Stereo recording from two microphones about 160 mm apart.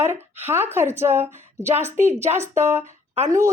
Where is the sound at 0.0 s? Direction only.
15° right (ahead or behind).